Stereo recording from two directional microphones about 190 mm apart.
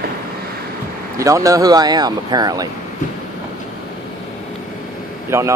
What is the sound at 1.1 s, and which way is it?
Speech, 15° right (ahead or behind).